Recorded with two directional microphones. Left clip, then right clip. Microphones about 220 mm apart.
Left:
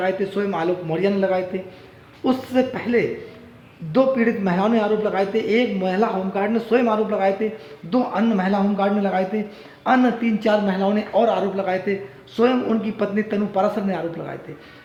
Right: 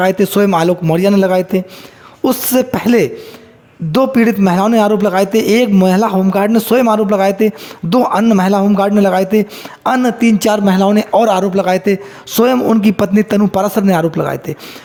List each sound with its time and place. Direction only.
0.0 s a man's voice: 55° right (ahead or behind)